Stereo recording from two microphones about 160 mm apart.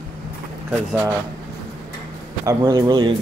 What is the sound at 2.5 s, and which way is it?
Speech, 25° right (ahead or behind).